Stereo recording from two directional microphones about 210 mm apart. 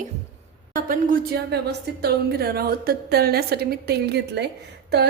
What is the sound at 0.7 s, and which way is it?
A woman's voice, 40° right (ahead or behind).